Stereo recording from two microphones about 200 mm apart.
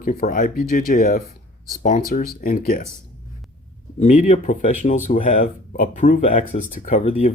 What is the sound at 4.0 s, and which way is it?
Speech, 35° left (ahead or behind).